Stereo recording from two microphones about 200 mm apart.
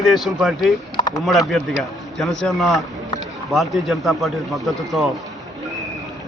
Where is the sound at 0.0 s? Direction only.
Centre (ahead or behind).